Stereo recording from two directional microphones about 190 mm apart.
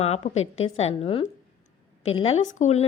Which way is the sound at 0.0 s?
35° left (ahead or behind).